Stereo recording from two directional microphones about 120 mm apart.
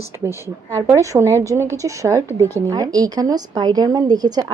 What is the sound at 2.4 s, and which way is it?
Speech, 20° left (ahead or behind).